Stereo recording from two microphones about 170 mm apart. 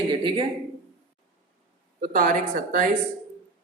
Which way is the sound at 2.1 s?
50° right (ahead or behind).